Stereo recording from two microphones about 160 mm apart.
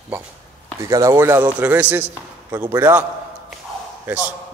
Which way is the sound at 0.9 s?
20° right (ahead or behind).